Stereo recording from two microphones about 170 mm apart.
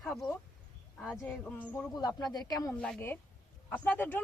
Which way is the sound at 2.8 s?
10° left (ahead or behind).